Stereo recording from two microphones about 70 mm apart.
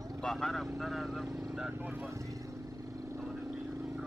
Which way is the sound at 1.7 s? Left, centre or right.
Right.